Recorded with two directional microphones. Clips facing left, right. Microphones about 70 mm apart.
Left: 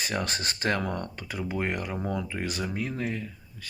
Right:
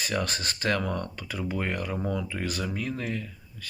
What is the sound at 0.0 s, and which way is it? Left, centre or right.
Speech, left.